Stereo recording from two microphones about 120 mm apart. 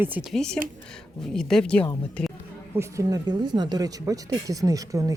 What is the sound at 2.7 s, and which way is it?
Speech, 30° right (ahead or behind).